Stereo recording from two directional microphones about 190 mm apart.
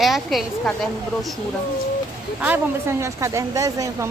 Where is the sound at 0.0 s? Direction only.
Centre (ahead or behind).